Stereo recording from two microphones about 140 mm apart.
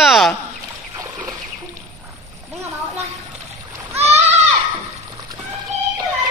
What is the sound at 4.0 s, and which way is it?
Goat, 50° right (ahead or behind).